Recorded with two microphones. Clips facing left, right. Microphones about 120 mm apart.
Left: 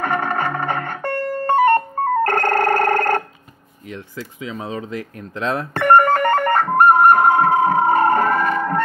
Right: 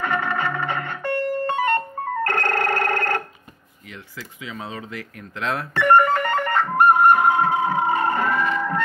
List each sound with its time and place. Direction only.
0.0 s music: 45° left (ahead or behind)
2.2 s telephone bell ringing: 45° left (ahead or behind)
4.5 s speech: 25° left (ahead or behind)
5.8 s music: 50° left (ahead or behind)